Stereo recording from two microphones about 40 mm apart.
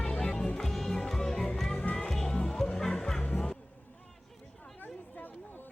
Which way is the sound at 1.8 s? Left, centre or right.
Left.